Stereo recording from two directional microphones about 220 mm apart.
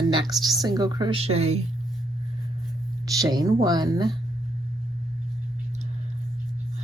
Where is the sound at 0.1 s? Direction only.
20° right (ahead or behind).